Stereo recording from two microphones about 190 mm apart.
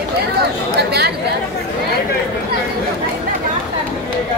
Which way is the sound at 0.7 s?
60° right (ahead or behind).